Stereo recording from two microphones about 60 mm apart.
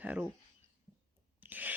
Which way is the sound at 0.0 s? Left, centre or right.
Right.